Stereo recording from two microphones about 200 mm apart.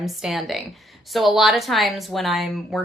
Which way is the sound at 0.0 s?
Centre (ahead or behind).